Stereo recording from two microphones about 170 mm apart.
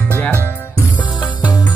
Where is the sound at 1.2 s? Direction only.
25° left (ahead or behind).